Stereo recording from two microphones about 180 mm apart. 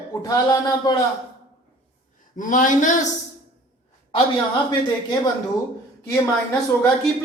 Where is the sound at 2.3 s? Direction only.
45° left (ahead or behind).